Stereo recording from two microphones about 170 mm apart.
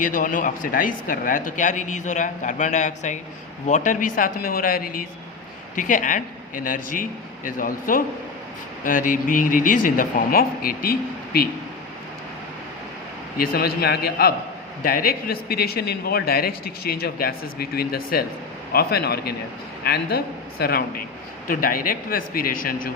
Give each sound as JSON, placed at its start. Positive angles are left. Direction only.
{"t": 0.0, "sound": "speech", "side_deg": 50}
{"t": 13.3, "sound": "a man's voice", "side_deg": 60}